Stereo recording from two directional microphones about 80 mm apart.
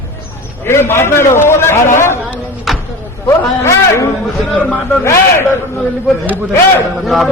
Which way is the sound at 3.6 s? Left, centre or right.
Left.